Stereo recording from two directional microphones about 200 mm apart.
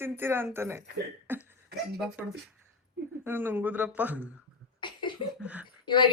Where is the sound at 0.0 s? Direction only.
10° right (ahead or behind).